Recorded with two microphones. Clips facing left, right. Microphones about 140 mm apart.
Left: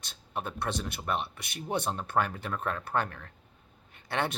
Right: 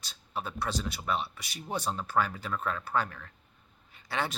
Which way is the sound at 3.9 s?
55° left (ahead or behind).